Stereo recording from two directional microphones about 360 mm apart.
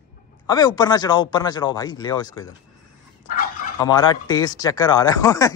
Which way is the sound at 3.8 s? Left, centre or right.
Centre.